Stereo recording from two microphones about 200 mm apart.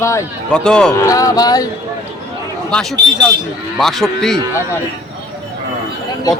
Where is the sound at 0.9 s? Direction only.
15° left (ahead or behind).